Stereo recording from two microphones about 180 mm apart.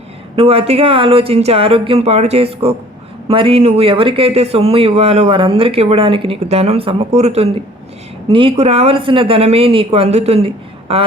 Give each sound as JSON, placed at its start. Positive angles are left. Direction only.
{"t": 0.3, "sound": "speech", "side_deg": -30}